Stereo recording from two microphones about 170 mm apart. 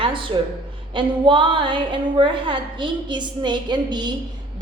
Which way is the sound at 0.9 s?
30° right (ahead or behind).